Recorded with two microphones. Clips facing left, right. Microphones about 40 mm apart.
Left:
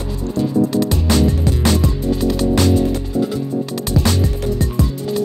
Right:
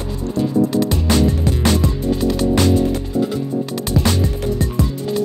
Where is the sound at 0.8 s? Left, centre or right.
Right.